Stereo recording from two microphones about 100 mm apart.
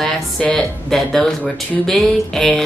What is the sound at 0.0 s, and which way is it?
A woman's voice, 5° left (ahead or behind).